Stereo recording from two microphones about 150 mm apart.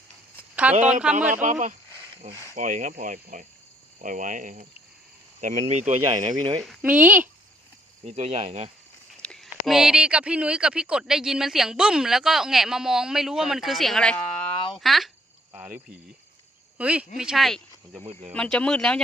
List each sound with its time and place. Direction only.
0.5 s a sound: 10° right (ahead or behind)
1.0 s speech: 10° right (ahead or behind)
1.4 s speech: 55° right (ahead or behind)
2.2 s speech: 70° right (ahead or behind)
2.6 s speech: 55° right (ahead or behind)
6.8 s speech: 10° right (ahead or behind)
8.0 s speech: 45° right (ahead or behind)
9.2 s speech: 5° left (ahead or behind)
14.4 s a sound: 35° left (ahead or behind)
14.8 s speech: centre (ahead or behind)
15.5 s cricket: 15° right (ahead or behind)
16.7 s speech: 10° right (ahead or behind)
18.0 s speech: 50° right (ahead or behind)
18.3 s speech: 5° left (ahead or behind)